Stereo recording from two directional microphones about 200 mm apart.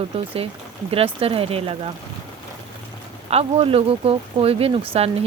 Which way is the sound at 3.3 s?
30° right (ahead or behind).